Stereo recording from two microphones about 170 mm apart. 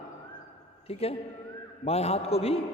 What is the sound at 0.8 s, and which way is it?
A man's voice, 35° left (ahead or behind).